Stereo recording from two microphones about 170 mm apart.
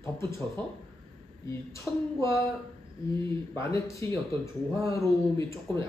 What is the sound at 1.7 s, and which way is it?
Speech, 15° left (ahead or behind).